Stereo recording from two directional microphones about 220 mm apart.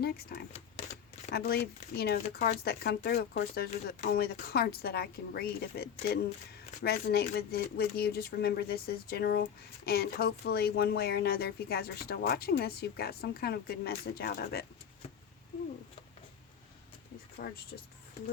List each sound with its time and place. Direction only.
0.0 s speech: 45° left (ahead or behind)
17.4 s speech: 40° left (ahead or behind)